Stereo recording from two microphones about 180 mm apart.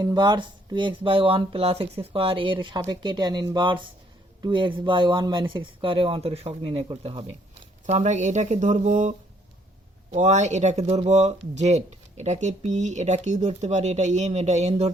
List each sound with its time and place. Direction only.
0.0 s speech: 25° right (ahead or behind)